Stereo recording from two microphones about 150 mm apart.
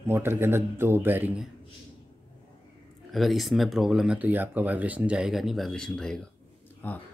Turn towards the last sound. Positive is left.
turn(degrees=15)  # may be behind; listen again after turning